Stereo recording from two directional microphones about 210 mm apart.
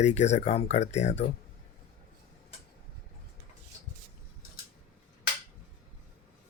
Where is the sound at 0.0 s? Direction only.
35° left (ahead or behind).